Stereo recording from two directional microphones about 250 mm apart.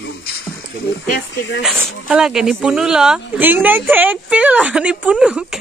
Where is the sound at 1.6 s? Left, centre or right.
Centre.